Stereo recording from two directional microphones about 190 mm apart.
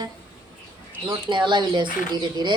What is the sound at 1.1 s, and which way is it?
Speech, 25° right (ahead or behind).